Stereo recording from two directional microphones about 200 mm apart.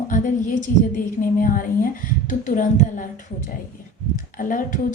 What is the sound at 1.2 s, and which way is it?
A woman's voice, 45° left (ahead or behind).